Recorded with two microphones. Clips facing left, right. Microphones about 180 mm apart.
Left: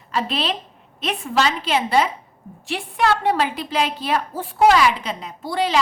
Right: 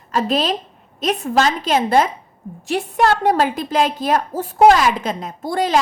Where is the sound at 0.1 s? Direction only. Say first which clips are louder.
Right 5 dB; 45° right (ahead or behind).